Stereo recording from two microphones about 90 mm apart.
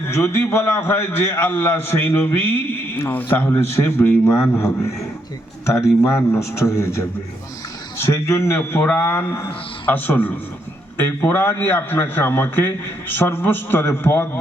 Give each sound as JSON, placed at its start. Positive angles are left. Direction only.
{"t": 0.1, "sound": "a man's voice", "side_deg": 25}